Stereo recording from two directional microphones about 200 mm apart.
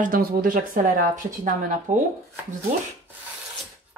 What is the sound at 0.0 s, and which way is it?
A woman's voice, 45° right (ahead or behind).